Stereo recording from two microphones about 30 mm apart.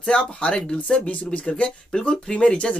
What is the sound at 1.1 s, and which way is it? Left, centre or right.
Speech, left.